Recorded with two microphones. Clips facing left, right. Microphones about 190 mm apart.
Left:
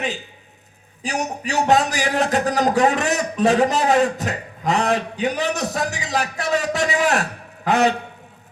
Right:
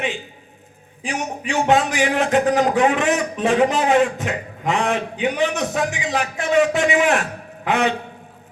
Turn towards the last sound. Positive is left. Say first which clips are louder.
# left 2 dB
turn(degrees=40)  # may be behind; listen again after turning